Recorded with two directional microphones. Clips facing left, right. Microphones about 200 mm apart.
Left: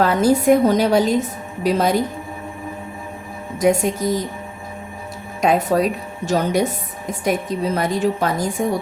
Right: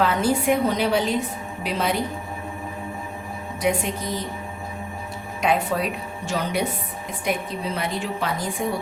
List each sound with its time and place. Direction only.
0.0 s a woman's voice: 40° left (ahead or behind)
3.6 s a woman's voice: 40° left (ahead or behind)
5.4 s a woman's voice: 40° left (ahead or behind)